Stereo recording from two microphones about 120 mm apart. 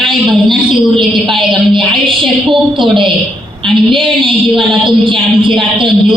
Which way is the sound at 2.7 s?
40° right (ahead or behind).